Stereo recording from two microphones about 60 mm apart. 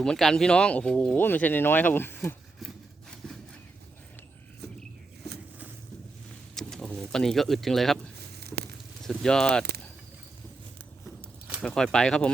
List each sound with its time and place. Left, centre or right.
0.0 s speech: centre
1.2 s speech: left
3.2 s a sound: centre
6.6 s bird: centre
9.0 s speech: centre
11.6 s speech: centre